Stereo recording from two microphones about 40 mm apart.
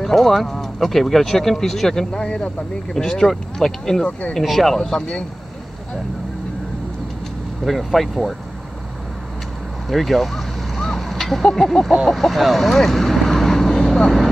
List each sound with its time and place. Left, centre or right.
0.0 s speech: centre
2.1 s speech: left
2.9 s speech: centre
7.6 s speech: centre
9.8 s a sound: centre
11.5 s speech: centre